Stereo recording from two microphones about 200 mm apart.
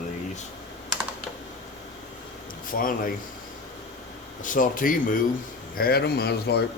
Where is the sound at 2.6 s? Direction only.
45° left (ahead or behind).